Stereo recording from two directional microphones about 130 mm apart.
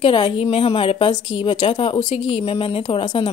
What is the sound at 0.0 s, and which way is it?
A woman's voice, 45° left (ahead or behind).